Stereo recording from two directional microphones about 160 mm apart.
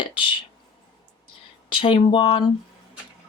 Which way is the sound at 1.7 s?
35° left (ahead or behind).